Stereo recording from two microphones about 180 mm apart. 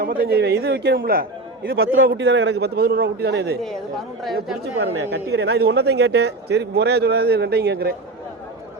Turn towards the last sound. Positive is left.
turn(degrees=-60)  # may be behind; listen again after turning